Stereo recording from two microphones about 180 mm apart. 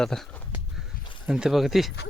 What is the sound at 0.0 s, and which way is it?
Speech, 5° left (ahead or behind).